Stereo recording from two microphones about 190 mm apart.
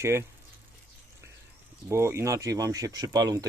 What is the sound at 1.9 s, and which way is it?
Speech, 15° right (ahead or behind).